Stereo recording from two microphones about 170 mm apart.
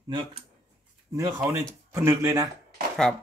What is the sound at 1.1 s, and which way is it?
Speech, 20° right (ahead or behind).